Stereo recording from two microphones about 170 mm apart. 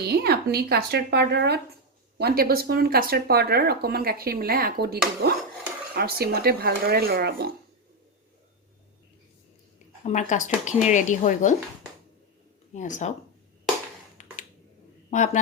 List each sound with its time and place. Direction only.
0.0 s speech: 65° right (ahead or behind)
10.0 s speech: 45° left (ahead or behind)
12.7 s speech: 45° left (ahead or behind)
14.2 s finger snapping: 45° left (ahead or behind)
15.1 s speech: 45° left (ahead or behind)